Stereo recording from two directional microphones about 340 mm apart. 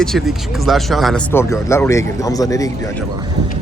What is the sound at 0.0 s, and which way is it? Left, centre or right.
Speech, centre.